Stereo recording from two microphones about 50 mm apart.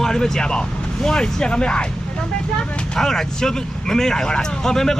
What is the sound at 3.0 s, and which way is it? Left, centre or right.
Speech, centre.